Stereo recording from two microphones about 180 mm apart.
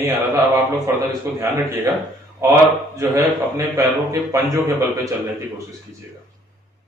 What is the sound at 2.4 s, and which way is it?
A man's voice, 15° right (ahead or behind).